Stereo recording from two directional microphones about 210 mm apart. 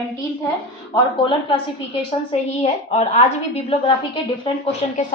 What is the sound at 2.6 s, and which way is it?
Speech, 30° left (ahead or behind).